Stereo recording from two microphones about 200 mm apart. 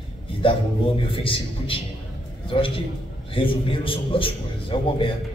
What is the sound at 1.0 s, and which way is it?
A man's voice, 25° left (ahead or behind).